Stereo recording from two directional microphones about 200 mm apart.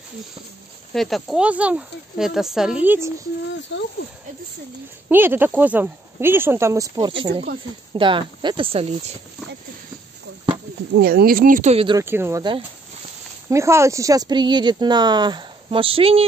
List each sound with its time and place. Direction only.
0.9 s speech: centre (ahead or behind)
3.7 s speech: 70° left (ahead or behind)
5.1 s speech: 10° right (ahead or behind); by 9.1 s 30° right (ahead or behind)
11.0 s speech: 50° right (ahead or behind); by 12.0 s 30° right (ahead or behind)
12.0 s speech: 10° right (ahead or behind); by 16.3 s 30° right (ahead or behind)